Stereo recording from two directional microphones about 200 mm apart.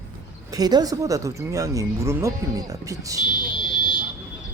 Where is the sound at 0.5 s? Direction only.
20° right (ahead or behind).